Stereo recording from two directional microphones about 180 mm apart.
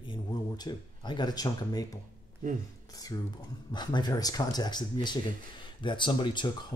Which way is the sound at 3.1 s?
20° left (ahead or behind).